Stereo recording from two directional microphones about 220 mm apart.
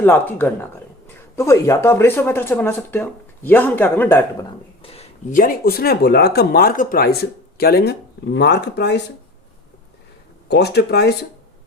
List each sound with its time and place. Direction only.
0.0 s speech: 10° left (ahead or behind); by 9.0 s 50° left (ahead or behind)
10.5 s speech: 50° left (ahead or behind)